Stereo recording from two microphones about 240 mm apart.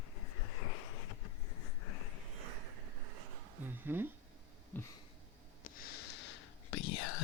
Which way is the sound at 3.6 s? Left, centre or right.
Centre.